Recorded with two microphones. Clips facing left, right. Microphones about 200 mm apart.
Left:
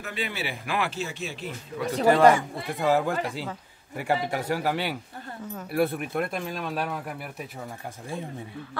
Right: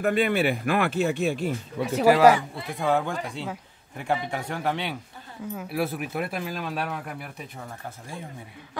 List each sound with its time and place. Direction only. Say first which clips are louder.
0.0 s speech: right 10 dB; 55° right (ahead or behind)
1.8 s speech: right 1 dB; 5° right (ahead or behind)